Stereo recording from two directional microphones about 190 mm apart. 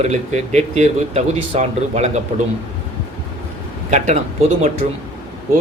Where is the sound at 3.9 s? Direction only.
40° right (ahead or behind).